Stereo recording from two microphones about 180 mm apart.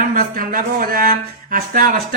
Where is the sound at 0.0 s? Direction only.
50° right (ahead or behind).